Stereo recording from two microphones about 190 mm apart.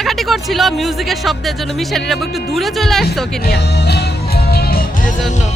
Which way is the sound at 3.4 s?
60° left (ahead or behind).